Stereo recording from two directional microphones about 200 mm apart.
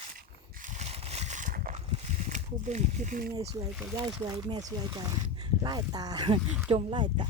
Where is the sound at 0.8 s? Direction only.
35° right (ahead or behind).